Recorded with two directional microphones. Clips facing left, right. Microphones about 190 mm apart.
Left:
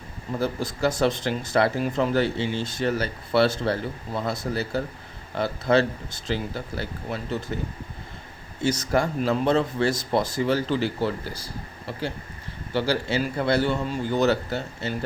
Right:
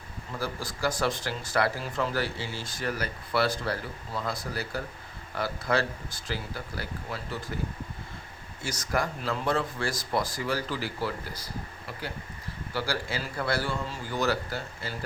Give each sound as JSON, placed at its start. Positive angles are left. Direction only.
{"t": 0.3, "sound": "speech", "side_deg": 25}
{"t": 8.6, "sound": "speech", "side_deg": 25}